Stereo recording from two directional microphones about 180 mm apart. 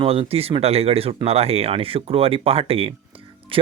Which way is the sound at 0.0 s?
35° right (ahead or behind).